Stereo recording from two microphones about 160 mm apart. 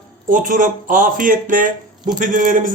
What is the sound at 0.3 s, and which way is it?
Speech, 55° right (ahead or behind).